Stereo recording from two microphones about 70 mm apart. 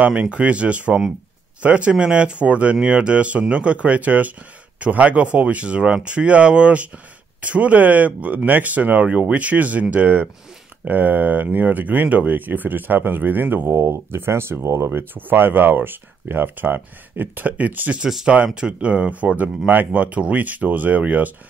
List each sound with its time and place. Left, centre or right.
0.0 s speech: centre; by 14.9 s right
14.9 s speech: right
18.0 s speech: centre